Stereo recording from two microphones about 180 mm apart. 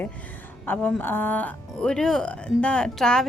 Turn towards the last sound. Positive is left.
turn(degrees=5)  # may be behind; listen again after turning